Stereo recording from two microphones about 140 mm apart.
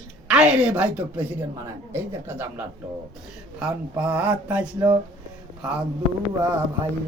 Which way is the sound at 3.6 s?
5° right (ahead or behind).